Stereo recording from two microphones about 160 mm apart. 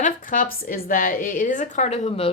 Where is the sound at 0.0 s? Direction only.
55° left (ahead or behind).